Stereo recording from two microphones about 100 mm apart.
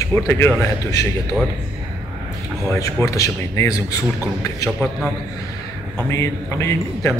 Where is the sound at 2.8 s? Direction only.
30° left (ahead or behind).